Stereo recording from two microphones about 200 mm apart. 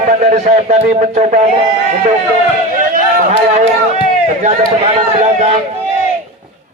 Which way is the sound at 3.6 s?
35° right (ahead or behind).